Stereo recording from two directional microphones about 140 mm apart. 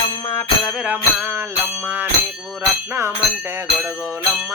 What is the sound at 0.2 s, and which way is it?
Music, 20° left (ahead or behind).